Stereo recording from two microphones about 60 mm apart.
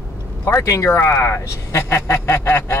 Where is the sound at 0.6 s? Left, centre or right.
Left.